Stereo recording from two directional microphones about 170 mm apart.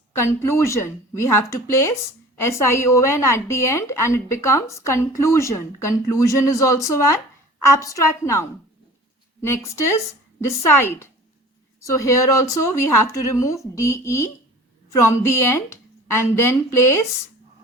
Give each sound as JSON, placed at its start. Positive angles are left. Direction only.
{"t": 0.2, "sound": "a woman's voice", "side_deg": 15}